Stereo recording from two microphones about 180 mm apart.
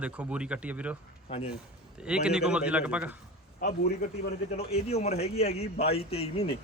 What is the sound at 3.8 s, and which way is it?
Speech, 55° left (ahead or behind).